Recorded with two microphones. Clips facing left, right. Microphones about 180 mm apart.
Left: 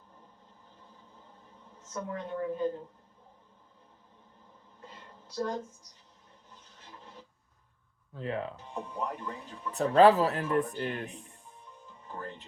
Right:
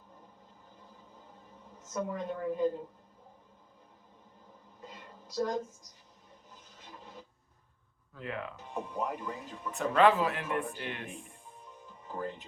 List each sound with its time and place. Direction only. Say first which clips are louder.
1.9 s speech: right 2 dB; 10° right (ahead or behind)
4.8 s a sound: right 2 dB; 10° right (ahead or behind)
8.1 s speech: left 5 dB; 30° left (ahead or behind)
8.7 s speech: right 2 dB; 5° right (ahead or behind)
9.7 s speech: left 4 dB; 35° left (ahead or behind)